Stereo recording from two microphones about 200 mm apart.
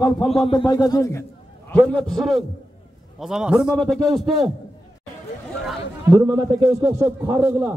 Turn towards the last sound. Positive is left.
turn(degrees=-15)  # may be behind; listen again after turning